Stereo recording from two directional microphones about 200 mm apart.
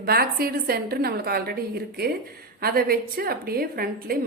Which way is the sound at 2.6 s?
50° right (ahead or behind).